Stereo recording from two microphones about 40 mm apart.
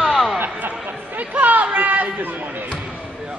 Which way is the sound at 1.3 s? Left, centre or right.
Right.